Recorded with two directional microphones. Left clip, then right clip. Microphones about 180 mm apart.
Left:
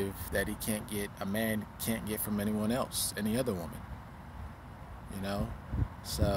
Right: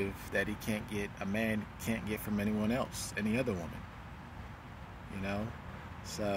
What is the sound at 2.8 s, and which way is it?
Speech, 25° left (ahead or behind).